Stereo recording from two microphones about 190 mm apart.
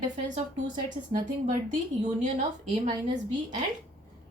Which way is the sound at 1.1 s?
45° right (ahead or behind).